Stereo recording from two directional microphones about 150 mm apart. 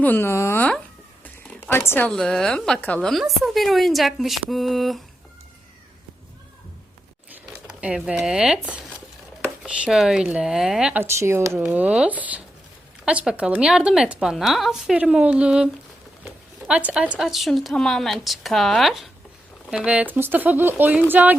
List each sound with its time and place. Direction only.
0.0 s speech: 15° left (ahead or behind)
7.7 s speech: 5° right (ahead or behind)
11.0 s speech: 15° right (ahead or behind)